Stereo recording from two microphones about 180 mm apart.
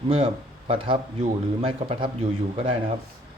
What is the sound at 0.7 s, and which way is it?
Speech, 30° right (ahead or behind).